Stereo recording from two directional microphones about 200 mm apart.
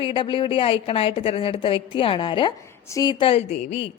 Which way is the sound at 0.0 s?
25° left (ahead or behind).